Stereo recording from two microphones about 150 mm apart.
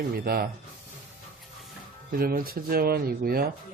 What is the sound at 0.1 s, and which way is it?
Speech, 90° right.